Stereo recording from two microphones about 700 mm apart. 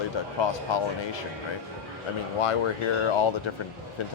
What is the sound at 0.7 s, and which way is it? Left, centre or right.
Speech, left.